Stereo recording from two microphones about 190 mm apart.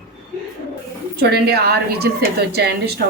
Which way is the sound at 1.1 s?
60° right (ahead or behind).